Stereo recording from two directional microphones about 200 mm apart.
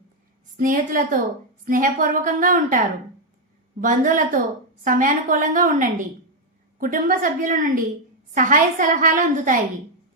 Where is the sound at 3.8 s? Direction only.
40° right (ahead or behind).